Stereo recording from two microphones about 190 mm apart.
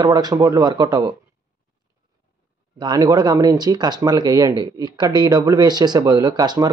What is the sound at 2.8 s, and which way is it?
Speech, 20° right (ahead or behind).